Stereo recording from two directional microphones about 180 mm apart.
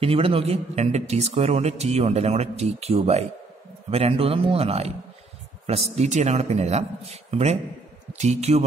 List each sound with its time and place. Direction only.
0.0 s speech: 30° right (ahead or behind)